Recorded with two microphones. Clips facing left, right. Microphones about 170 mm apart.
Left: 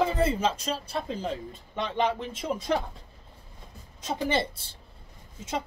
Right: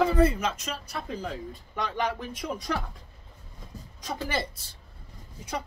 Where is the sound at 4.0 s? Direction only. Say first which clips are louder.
Left 4 dB; 25° left (ahead or behind).